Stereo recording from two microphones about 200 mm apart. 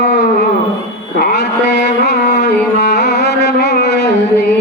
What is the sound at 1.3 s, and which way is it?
Music, 60° left (ahead or behind).